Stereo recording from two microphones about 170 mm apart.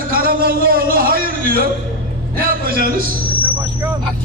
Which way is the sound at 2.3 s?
60° right (ahead or behind).